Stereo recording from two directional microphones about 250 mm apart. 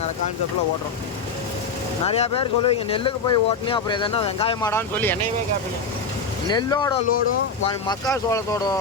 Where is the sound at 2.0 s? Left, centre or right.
Left; by 5.1 s centre.